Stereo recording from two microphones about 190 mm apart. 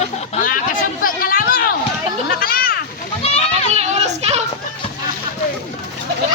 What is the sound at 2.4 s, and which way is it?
Children playing, 50° left (ahead or behind).